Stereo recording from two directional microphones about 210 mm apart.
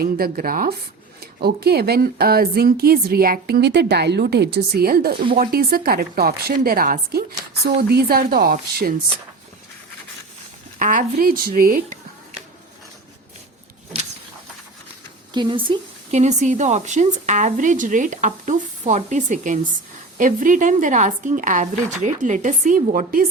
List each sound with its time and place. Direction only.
0.0 s speech: 45° right (ahead or behind)
10.8 s speech: 40° right (ahead or behind)
15.3 s speech: 20° right (ahead or behind)
16.1 s speech: 35° right (ahead or behind)